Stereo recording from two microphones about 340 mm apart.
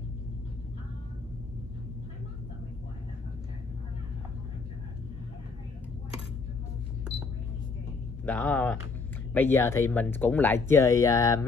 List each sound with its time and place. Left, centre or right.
8.3 s speech: centre